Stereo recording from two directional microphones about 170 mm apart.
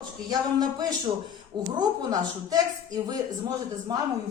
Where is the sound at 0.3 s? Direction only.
20° right (ahead or behind).